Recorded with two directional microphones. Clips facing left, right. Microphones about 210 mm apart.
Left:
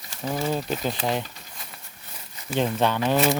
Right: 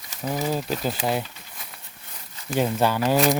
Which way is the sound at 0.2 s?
5° right (ahead or behind).